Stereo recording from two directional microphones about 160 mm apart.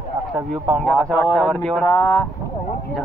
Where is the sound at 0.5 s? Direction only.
Centre (ahead or behind).